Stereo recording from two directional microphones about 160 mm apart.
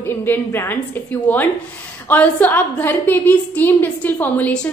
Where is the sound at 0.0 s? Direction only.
15° left (ahead or behind).